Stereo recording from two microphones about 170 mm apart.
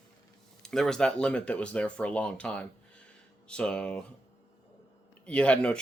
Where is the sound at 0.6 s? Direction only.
5° left (ahead or behind).